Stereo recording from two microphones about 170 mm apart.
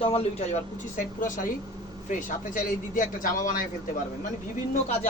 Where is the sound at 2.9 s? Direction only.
50° left (ahead or behind).